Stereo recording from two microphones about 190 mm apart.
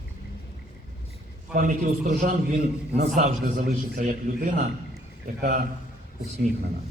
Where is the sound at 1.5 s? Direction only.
45° right (ahead or behind).